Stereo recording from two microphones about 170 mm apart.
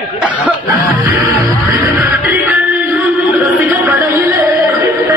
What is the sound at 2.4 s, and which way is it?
Music, 10° right (ahead or behind).